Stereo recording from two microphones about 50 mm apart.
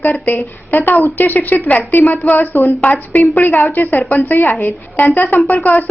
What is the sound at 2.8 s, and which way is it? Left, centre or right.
A woman's voice, left.